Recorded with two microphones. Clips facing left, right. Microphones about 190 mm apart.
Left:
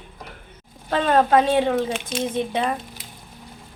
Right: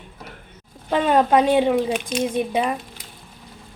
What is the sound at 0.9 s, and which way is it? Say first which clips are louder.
A woman's voice: right 1 dB; 15° right (ahead or behind).